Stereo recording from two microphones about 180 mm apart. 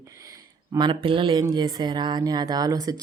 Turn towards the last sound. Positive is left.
turn(degrees=-20)  # may be behind; listen again after turning